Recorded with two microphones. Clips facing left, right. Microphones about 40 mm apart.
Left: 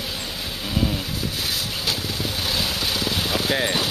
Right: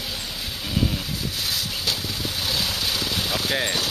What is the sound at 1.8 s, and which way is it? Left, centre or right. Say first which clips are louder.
Vehicle: left 1 dB; centre.